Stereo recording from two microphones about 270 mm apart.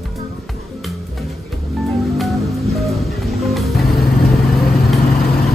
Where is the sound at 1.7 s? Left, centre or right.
Centre.